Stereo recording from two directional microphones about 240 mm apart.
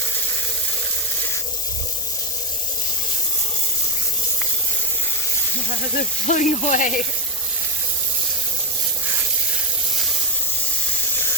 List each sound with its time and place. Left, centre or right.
5.8 s speech: left